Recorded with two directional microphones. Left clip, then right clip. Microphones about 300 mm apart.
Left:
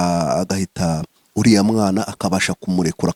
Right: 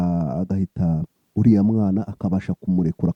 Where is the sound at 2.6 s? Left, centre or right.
Centre.